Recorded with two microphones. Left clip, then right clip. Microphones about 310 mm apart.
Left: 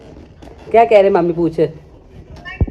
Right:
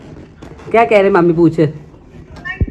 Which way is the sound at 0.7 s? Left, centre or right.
Right.